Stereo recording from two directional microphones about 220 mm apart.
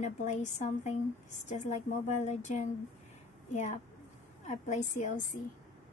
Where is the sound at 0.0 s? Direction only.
30° left (ahead or behind).